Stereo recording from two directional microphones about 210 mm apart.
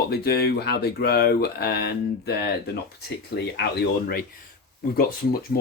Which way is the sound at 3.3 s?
55° left (ahead or behind).